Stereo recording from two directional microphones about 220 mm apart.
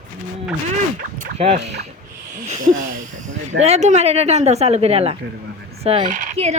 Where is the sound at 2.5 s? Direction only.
35° right (ahead or behind).